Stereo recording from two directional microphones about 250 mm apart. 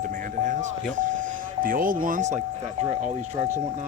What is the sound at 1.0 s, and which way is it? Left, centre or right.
Speech, right.